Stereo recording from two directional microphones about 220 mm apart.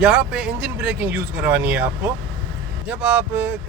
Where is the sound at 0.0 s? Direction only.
5° right (ahead or behind).